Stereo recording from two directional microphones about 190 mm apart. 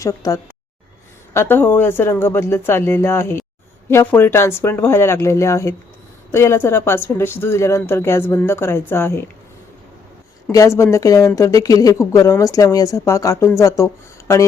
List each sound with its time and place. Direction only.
0.0 s speech: 15° left (ahead or behind)
10.5 s speech: 15° left (ahead or behind)